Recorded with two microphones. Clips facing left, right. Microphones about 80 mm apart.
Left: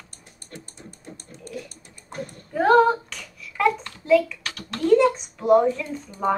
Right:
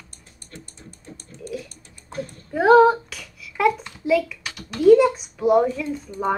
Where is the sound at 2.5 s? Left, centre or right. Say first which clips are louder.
Right 3 dB; centre.